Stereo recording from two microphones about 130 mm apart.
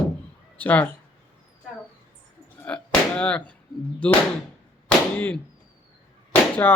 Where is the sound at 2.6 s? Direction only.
10° left (ahead or behind).